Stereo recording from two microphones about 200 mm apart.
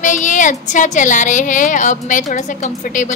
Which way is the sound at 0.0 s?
40° left (ahead or behind).